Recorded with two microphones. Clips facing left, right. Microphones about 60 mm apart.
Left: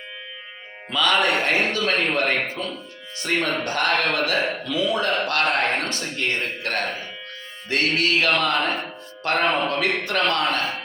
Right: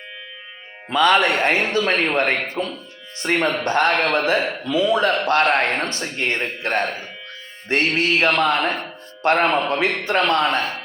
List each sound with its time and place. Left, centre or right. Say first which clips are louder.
0.9 s a man's voice: right 4 dB; right